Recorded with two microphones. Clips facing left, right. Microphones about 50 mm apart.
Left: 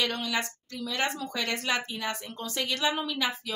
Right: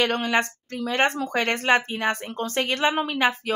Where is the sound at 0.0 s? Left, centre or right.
Right.